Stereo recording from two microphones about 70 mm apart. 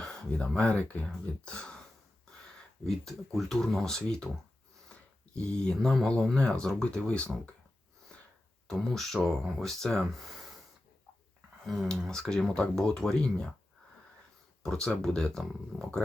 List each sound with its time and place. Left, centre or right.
0.3 s speech: centre
2.8 s speech: centre
5.7 s speech: centre
8.6 s speech: centre
11.6 s speech: centre
14.6 s speech: centre